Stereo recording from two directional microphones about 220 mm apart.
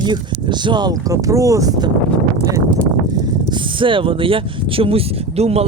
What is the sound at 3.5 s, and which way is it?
Speech, 20° right (ahead or behind).